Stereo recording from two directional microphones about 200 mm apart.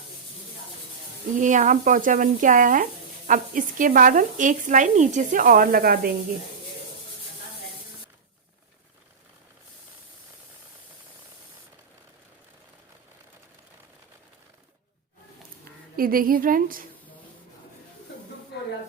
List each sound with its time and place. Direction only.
1.4 s speech: 40° right (ahead or behind)
16.0 s a woman's voice: 45° right (ahead or behind)